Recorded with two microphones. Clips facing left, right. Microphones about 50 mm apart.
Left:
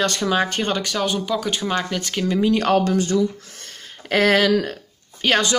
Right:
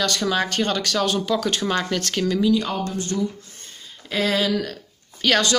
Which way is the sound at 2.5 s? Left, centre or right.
Left.